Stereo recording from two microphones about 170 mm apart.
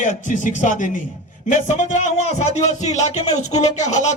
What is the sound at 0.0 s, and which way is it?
Speech, 50° left (ahead or behind).